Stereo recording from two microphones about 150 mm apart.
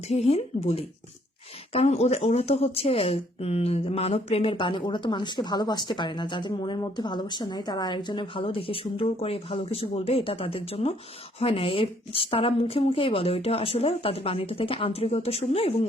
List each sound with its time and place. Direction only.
0.1 s speech: 45° left (ahead or behind)